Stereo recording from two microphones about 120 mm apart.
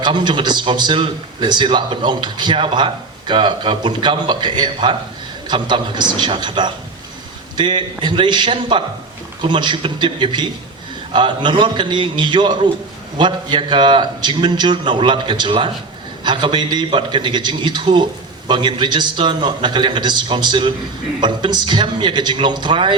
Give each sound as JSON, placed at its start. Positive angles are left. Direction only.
{"t": 0.0, "sound": "a man's voice", "side_deg": -40}